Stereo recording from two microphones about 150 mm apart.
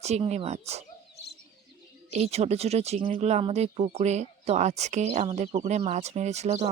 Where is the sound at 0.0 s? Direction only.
45° right (ahead or behind).